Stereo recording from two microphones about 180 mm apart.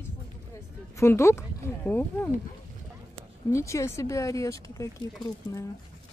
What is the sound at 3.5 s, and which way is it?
Speech, 15° left (ahead or behind).